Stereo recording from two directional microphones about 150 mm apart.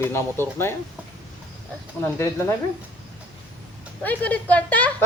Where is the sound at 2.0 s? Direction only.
15° left (ahead or behind).